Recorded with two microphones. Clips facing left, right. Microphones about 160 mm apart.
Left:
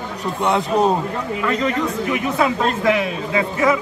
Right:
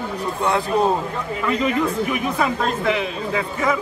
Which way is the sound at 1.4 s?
10° right (ahead or behind).